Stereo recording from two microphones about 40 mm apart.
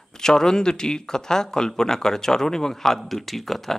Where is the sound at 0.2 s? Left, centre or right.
Centre.